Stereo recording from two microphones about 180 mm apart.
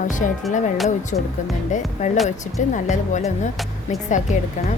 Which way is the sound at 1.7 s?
40° left (ahead or behind).